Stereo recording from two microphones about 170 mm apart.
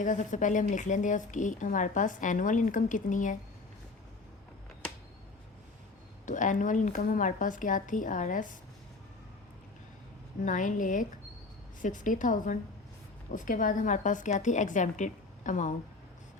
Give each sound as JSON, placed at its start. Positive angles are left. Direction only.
{"t": 0.0, "sound": "speech", "side_deg": 50}
{"t": 6.2, "sound": "speech", "side_deg": 50}
{"t": 10.4, "sound": "speech", "side_deg": 50}